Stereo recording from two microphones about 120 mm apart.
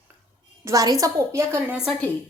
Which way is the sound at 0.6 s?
30° right (ahead or behind).